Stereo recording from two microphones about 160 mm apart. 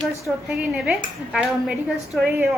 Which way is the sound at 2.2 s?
15° right (ahead or behind).